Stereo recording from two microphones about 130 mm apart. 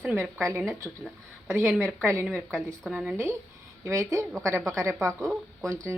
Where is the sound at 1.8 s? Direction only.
20° right (ahead or behind).